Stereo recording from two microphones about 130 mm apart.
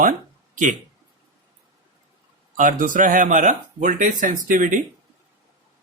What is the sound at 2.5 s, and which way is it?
Speech, 90° right.